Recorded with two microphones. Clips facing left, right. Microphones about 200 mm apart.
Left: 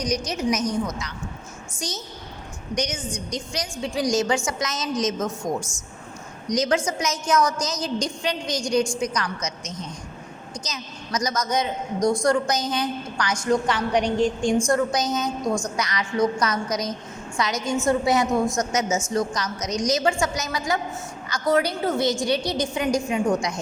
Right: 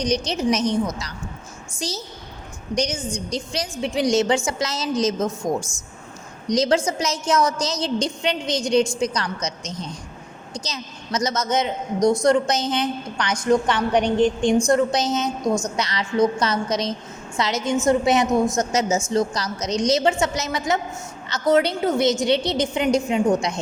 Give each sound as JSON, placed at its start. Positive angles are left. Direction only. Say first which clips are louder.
{"t": 0.0, "sound": "a woman's voice", "louder": "right 3 dB", "side_deg": -30}
{"t": 3.2, "sound": "a woman's voice", "louder": "right 3 dB", "side_deg": -30}
{"t": 6.5, "sound": "a woman's voice", "louder": "right 3 dB", "side_deg": -30}